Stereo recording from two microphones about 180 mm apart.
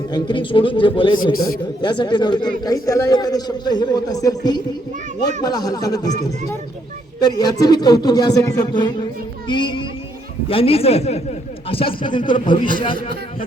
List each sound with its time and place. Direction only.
0.1 s a man's voice: 25° left (ahead or behind)
7.2 s a man's voice: 20° left (ahead or behind)